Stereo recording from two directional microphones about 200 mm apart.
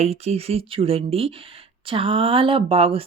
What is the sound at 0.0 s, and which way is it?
A woman's voice, 30° right (ahead or behind).